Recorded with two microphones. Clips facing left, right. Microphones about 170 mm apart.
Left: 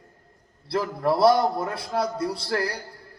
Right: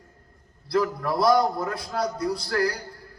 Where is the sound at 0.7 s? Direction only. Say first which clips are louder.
Even; 30° left (ahead or behind).